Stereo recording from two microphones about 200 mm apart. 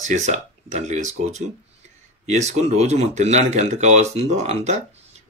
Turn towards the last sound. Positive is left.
turn(degrees=-35)  # may be behind; listen again after turning